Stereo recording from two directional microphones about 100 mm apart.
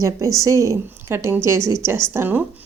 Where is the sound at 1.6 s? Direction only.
45° left (ahead or behind).